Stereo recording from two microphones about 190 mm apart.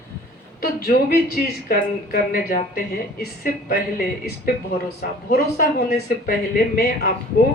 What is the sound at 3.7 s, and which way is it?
A woman's voice, 55° left (ahead or behind).